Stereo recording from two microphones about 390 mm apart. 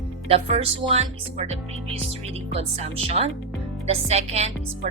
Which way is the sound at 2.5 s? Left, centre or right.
Centre.